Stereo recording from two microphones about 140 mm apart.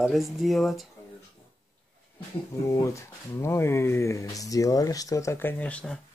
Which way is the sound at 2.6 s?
20° left (ahead or behind).